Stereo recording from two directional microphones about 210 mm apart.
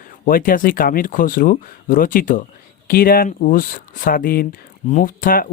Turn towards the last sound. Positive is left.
turn(degrees=40)  # may be behind; listen again after turning